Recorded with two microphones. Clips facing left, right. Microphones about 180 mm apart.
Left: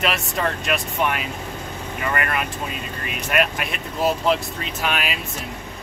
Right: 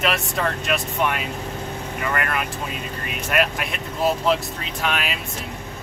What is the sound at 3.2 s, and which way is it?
Speech, centre (ahead or behind).